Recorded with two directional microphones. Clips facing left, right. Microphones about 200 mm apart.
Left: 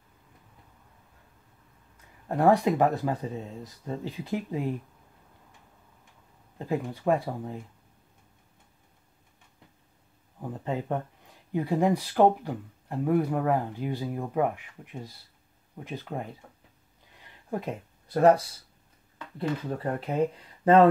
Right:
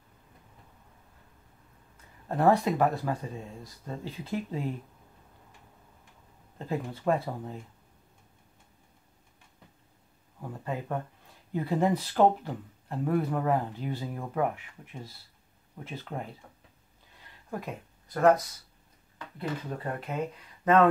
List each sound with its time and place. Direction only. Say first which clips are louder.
2.2 s speech: left 2 dB; 15° left (ahead or behind)
6.6 s speech: left 2 dB; 15° left (ahead or behind)
10.4 s speech: left 4 dB; 20° left (ahead or behind)
17.5 s speech: left 4 dB; 25° left (ahead or behind)
19.8 s speech: left 8 dB; 30° left (ahead or behind)